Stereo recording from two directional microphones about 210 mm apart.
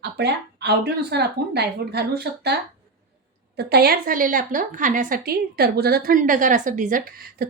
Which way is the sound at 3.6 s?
50° right (ahead or behind).